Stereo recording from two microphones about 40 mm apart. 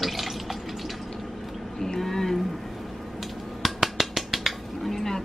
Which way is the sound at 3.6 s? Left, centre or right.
Centre.